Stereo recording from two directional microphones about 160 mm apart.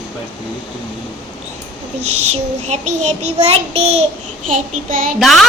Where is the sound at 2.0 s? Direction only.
40° right (ahead or behind).